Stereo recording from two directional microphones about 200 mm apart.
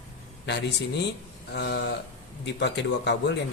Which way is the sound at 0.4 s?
55° left (ahead or behind).